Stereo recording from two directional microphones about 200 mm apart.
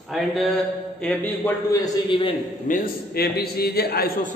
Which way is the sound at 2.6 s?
45° left (ahead or behind).